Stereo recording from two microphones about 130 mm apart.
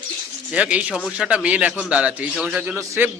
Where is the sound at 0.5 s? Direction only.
10° right (ahead or behind).